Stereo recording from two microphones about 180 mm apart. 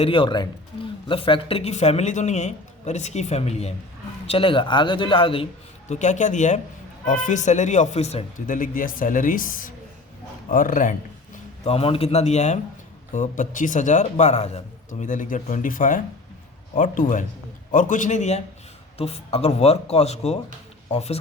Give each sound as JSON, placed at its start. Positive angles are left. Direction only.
{"t": 0.0, "sound": "speech", "side_deg": 30}
{"t": 5.9, "sound": "speech", "side_deg": 40}
{"t": 11.6, "sound": "speech", "side_deg": 35}